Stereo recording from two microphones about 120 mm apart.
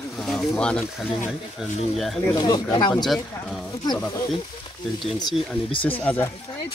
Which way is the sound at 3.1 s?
5° left (ahead or behind).